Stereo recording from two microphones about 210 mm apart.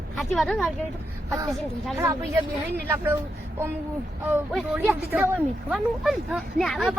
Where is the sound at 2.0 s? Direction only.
15° right (ahead or behind).